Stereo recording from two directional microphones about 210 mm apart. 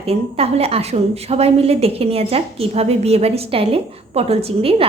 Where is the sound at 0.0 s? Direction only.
30° right (ahead or behind).